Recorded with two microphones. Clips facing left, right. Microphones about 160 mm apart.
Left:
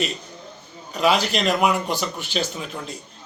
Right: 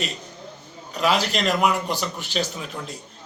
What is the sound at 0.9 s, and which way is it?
Speech, centre (ahead or behind).